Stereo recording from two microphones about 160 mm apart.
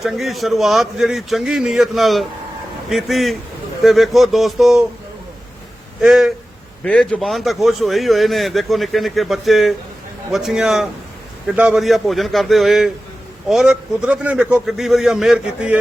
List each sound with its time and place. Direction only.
0.0 s a man's voice: centre (ahead or behind)
6.0 s a man's voice: 5° right (ahead or behind)
6.8 s a man's voice: 5° left (ahead or behind)